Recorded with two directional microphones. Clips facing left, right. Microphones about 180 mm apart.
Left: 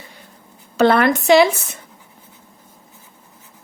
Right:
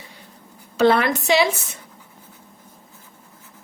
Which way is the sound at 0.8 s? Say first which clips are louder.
Left 3 dB; 55° left (ahead or behind).